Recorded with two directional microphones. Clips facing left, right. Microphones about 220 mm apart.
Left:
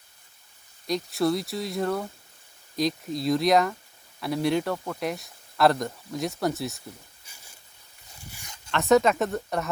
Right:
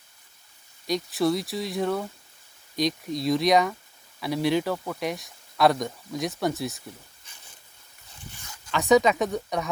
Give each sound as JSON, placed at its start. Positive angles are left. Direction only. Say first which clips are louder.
{"t": 0.9, "sound": "speech", "louder": "right 1 dB", "side_deg": 0}
{"t": 8.4, "sound": "a sound", "louder": "right 1 dB", "side_deg": 20}
{"t": 8.7, "sound": "speech", "louder": "even", "side_deg": 0}